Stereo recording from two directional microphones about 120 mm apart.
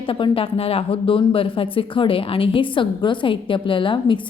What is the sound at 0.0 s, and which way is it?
Speech, 45° left (ahead or behind).